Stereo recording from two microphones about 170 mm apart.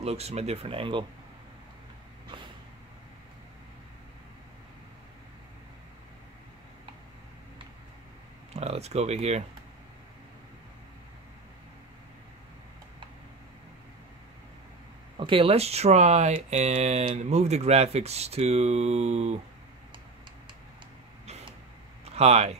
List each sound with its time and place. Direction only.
0.0 s speech: 40° right (ahead or behind)
8.5 s speech: 40° right (ahead or behind)
15.1 s speech: 30° right (ahead or behind)
22.0 s speech: 40° right (ahead or behind)